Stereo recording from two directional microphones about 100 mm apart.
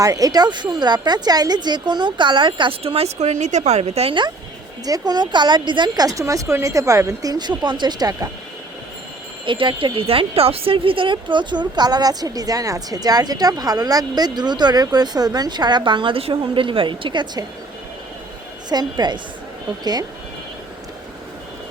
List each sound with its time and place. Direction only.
0.0 s speech: 35° right (ahead or behind); by 2.7 s 55° right (ahead or behind)
2.8 s a woman's voice: 85° right
4.9 s speech: 45° right (ahead or behind)
9.5 s speech: 55° right (ahead or behind)
18.7 s speech: 45° right (ahead or behind)